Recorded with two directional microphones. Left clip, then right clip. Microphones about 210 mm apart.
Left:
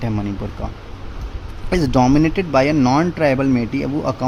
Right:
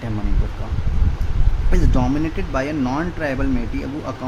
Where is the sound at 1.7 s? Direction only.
30° left (ahead or behind).